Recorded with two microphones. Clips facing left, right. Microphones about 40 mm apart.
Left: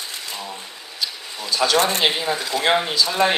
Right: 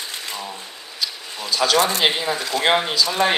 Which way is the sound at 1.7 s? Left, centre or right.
Left.